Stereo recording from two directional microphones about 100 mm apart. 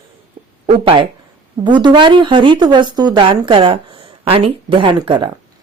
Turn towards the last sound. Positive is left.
turn(degrees=-50)  # may be behind; listen again after turning